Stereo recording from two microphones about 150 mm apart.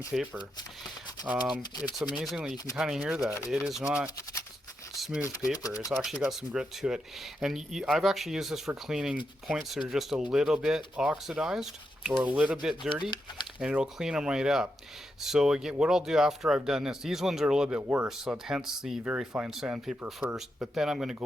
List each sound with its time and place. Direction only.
0.1 s speech: 5° right (ahead or behind)
4.9 s a sound: centre (ahead or behind)
5.9 s speech: centre (ahead or behind)
12.9 s speech: 30° left (ahead or behind)
13.6 s speech: 5° right (ahead or behind)